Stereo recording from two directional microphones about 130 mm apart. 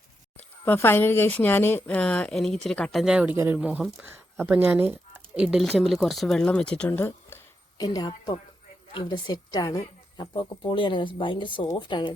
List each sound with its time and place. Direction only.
0.6 s a woman's voice: 15° left (ahead or behind); by 3.3 s 10° right (ahead or behind)
3.3 s speech: 20° right (ahead or behind)
3.6 s speech: 10° right (ahead or behind); by 7.3 s 15° left (ahead or behind)
7.8 s a woman's voice: 30° left (ahead or behind)